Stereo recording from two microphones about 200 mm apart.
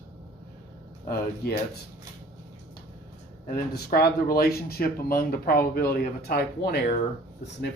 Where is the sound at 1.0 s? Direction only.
50° left (ahead or behind).